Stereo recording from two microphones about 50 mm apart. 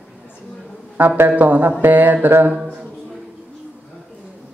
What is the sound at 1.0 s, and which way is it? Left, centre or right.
Speech, right.